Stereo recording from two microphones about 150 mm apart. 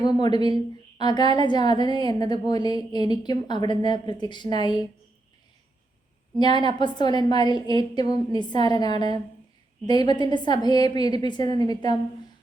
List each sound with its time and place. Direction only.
0.2 s a woman's voice: 30° left (ahead or behind)
6.4 s a woman's voice: 30° left (ahead or behind)